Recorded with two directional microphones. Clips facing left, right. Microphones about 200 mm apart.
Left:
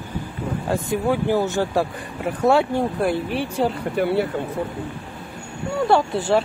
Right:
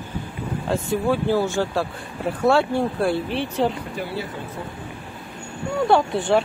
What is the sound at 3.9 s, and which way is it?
Speech, 60° left (ahead or behind).